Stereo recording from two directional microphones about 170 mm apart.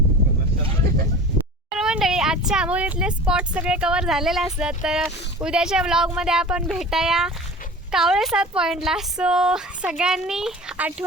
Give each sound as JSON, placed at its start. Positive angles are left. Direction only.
{"t": 1.7, "sound": "speech", "side_deg": -5}